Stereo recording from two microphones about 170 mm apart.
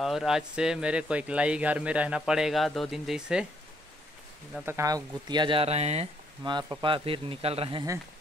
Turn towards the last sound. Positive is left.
turn(degrees=-35)  # may be behind; listen again after turning